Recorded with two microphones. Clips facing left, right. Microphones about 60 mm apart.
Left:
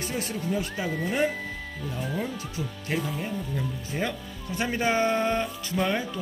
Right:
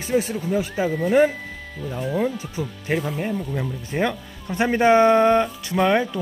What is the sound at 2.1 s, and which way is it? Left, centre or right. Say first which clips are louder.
Speech: right 8 dB; right.